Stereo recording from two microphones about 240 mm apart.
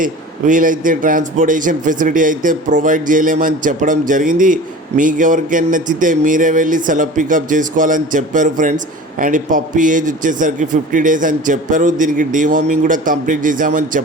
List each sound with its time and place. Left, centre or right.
0.0 s a man's voice: right